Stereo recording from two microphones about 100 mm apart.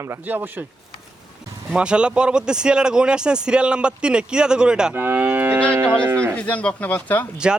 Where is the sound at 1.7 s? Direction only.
10° right (ahead or behind).